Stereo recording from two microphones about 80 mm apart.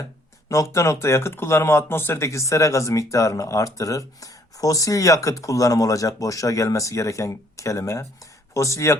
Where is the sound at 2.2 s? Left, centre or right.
Left.